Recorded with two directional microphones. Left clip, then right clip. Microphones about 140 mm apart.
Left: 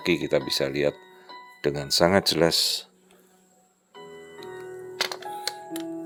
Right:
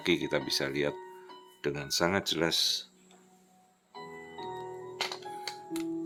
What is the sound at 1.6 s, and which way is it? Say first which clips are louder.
Speech: left 8 dB; 45° left (ahead or behind).